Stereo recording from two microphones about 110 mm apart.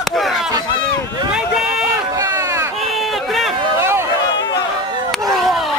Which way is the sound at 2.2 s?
30° right (ahead or behind).